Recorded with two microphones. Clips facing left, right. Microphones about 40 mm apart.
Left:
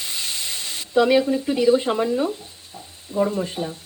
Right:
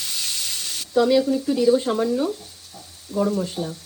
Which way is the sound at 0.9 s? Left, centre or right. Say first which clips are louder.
Left 1 dB; left.